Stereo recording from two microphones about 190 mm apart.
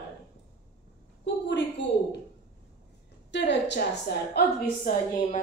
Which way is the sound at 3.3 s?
65° left (ahead or behind).